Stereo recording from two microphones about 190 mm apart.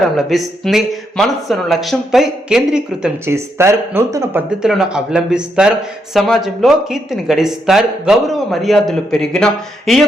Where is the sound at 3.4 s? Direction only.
15° right (ahead or behind).